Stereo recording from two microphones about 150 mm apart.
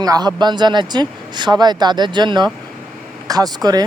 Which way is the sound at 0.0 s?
25° right (ahead or behind).